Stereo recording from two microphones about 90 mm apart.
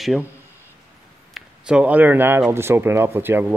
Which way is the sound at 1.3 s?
10° right (ahead or behind).